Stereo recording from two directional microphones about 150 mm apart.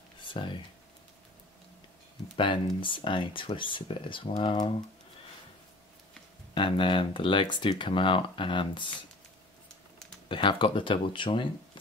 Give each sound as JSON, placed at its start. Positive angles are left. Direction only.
{"t": 0.2, "sound": "computer keyboard", "side_deg": 35}
{"t": 2.3, "sound": "speech", "side_deg": 35}
{"t": 6.5, "sound": "speech", "side_deg": 35}
{"t": 10.2, "sound": "speech", "side_deg": 35}